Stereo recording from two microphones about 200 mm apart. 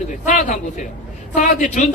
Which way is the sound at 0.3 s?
40° left (ahead or behind).